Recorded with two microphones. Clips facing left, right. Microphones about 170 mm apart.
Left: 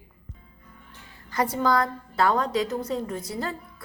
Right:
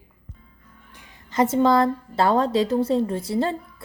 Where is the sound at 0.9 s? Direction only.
20° right (ahead or behind).